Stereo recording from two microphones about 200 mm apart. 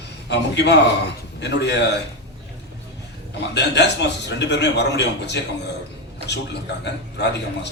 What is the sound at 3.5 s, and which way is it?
A man's voice, 60° left (ahead or behind).